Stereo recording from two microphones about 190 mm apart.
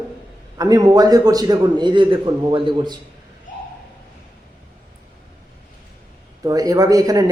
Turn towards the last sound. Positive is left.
turn(degrees=-20)  # may be behind; listen again after turning